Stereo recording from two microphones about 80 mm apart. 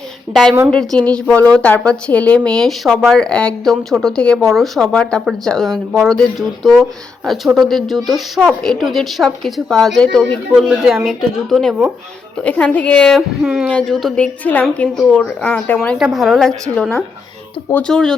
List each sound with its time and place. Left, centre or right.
0.7 s a woman's voice: centre
10.5 s a woman's voice: centre
12.4 s a woman's voice: centre
13.1 s speech: centre
13.7 s a woman's voice: centre
14.4 s speech: left
16.0 s speech: centre
17.8 s a woman's voice: centre